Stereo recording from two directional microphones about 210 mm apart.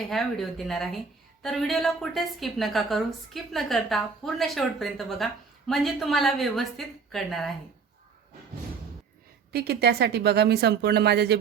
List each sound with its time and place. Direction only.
0.1 s a woman's voice: centre (ahead or behind)
9.5 s speech: 50° right (ahead or behind)